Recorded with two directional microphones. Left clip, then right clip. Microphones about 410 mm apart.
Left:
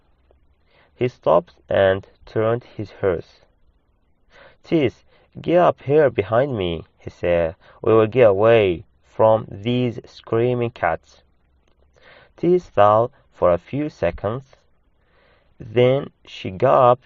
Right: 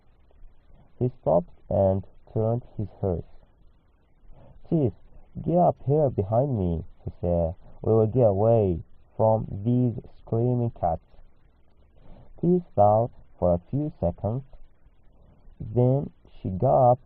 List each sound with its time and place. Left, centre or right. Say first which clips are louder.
1.2 s speech: left 6 dB; left
4.7 s speech: left 7 dB; left
12.4 s speech: left 6 dB; left
15.7 s speech: left 8 dB; left